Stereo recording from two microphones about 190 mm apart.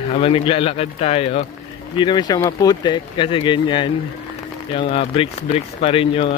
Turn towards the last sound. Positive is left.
turn(degrees=30)  # may be behind; listen again after turning